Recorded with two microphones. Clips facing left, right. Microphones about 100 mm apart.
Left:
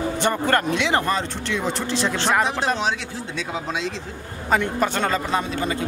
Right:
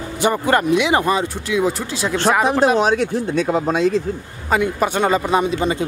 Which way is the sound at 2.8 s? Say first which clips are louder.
Right 8 dB; 50° right (ahead or behind).